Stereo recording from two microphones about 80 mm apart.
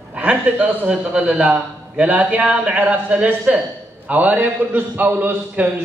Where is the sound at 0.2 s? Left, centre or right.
Centre.